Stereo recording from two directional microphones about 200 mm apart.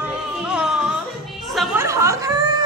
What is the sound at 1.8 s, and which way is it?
Snicker, 15° right (ahead or behind).